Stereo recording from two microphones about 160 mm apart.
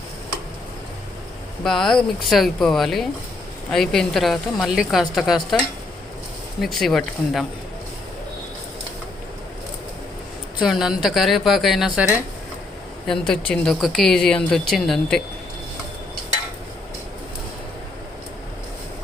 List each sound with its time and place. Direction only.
1.6 s speech: 5° left (ahead or behind)
10.6 s speech: centre (ahead or behind)